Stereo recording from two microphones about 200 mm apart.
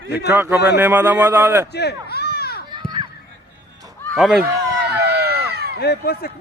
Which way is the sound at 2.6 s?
20° right (ahead or behind).